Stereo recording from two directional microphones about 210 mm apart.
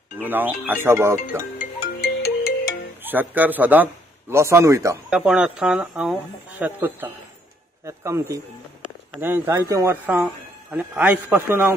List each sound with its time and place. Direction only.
0.2 s speech: 10° right (ahead or behind)
1.6 s ringtone: 45° left (ahead or behind)
3.0 s a man's voice: 10° right (ahead or behind)
5.1 s speech: 5° right (ahead or behind)